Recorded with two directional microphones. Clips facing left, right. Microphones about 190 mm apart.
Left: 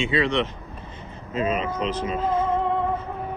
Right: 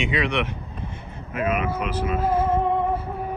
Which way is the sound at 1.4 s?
10° right (ahead or behind).